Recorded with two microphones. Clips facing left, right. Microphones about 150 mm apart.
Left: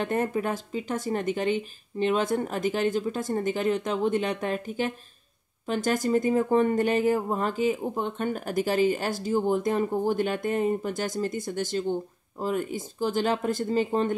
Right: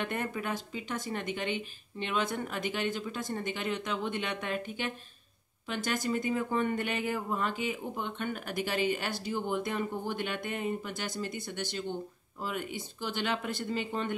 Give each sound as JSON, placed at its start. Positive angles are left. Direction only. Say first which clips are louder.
{"t": 0.0, "sound": "speech", "louder": "left 8 dB", "side_deg": 35}